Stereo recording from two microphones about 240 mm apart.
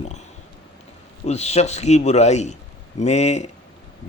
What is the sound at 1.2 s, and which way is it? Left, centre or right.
Speech, left.